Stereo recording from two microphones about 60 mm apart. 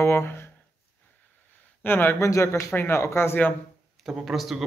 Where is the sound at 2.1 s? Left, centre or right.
Left.